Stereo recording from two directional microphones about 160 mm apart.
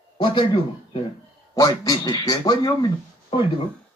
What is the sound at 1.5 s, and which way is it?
A man's voice, 20° left (ahead or behind).